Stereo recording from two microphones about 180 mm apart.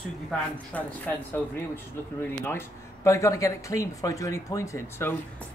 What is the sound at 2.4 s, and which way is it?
Speech, 15° left (ahead or behind).